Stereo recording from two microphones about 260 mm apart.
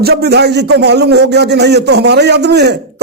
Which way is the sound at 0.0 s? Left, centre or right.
Right.